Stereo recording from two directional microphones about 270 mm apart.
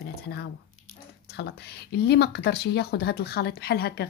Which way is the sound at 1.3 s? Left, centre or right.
Left.